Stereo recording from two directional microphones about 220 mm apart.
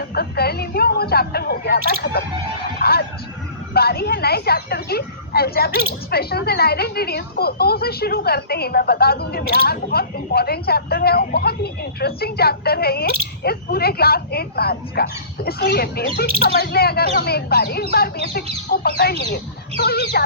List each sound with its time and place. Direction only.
0.1 s speech: 45° left (ahead or behind)
2.8 s a sound: 45° left (ahead or behind)
3.8 s speech: 45° left (ahead or behind)